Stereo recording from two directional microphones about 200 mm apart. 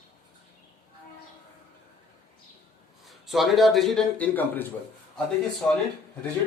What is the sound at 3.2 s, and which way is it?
Speech, centre (ahead or behind).